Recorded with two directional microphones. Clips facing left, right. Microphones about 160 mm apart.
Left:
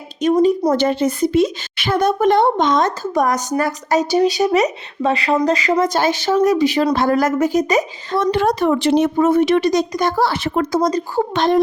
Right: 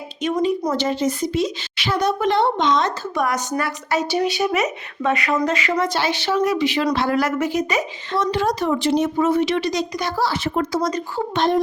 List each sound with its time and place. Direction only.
0.2 s a woman's voice: 40° left (ahead or behind)
0.7 s a woman's voice: 55° left (ahead or behind)
8.3 s speech: 55° left (ahead or behind)
9.1 s a woman's voice: 50° left (ahead or behind); by 10.7 s 65° left (ahead or behind)
10.7 s a woman's voice: 50° left (ahead or behind)
11.3 s speech: 90° left